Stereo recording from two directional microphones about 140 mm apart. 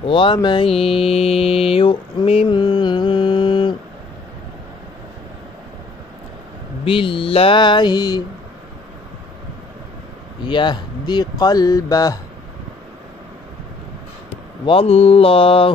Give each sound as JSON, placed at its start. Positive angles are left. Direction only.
{"t": 0.0, "sound": "mantra", "side_deg": 35}
{"t": 6.8, "sound": "mantra", "side_deg": 40}
{"t": 10.4, "sound": "speech", "side_deg": 35}
{"t": 14.7, "sound": "mantra", "side_deg": 45}